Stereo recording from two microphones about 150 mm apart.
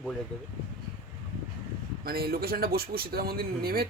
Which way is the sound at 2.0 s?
90° right.